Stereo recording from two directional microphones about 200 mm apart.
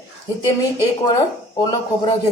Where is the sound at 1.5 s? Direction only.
20° left (ahead or behind).